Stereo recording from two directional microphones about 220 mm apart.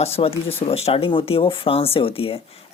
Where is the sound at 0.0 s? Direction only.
25° left (ahead or behind).